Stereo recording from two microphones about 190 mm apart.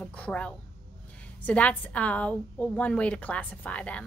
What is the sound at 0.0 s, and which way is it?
A woman's voice, 5° left (ahead or behind).